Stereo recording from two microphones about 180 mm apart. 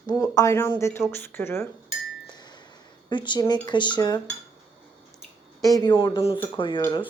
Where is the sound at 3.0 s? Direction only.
25° left (ahead or behind).